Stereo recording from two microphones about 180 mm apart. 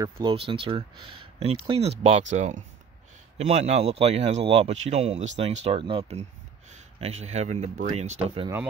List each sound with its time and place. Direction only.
0.0 s speech: 30° right (ahead or behind)